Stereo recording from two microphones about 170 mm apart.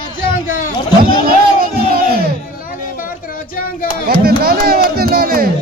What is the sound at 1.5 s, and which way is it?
Crowd, 60° right (ahead or behind).